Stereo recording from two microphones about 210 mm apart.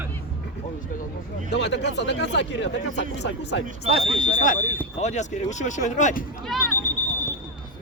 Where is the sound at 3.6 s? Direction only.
30° right (ahead or behind).